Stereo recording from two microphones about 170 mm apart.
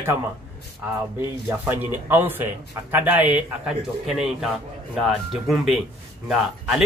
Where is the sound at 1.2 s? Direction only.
10° right (ahead or behind).